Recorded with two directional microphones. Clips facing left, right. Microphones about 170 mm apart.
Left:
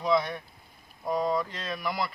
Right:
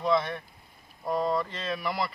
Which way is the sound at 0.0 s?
Centre (ahead or behind).